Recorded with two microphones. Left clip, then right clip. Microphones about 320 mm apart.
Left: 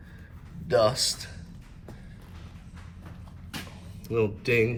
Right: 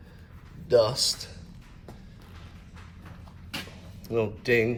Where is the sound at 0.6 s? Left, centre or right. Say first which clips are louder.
Right 1 dB; centre.